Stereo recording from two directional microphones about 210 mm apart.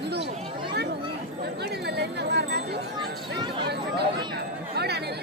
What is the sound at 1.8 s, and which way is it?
Wind chime, 50° right (ahead or behind).